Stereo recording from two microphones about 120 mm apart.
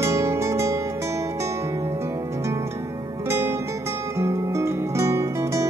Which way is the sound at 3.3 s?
20° right (ahead or behind).